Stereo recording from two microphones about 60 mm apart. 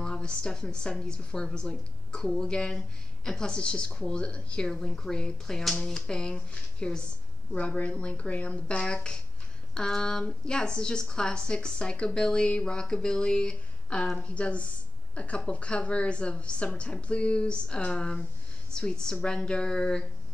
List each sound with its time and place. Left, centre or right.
0.0 s a woman's voice: centre